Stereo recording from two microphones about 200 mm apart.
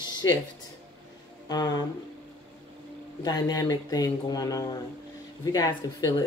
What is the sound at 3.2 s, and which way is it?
Speech, 20° left (ahead or behind).